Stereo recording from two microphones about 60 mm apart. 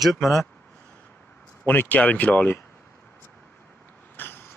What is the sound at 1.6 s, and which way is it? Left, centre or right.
Speech, left.